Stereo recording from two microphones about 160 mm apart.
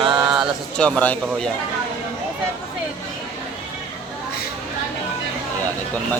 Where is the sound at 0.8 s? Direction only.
5° left (ahead or behind).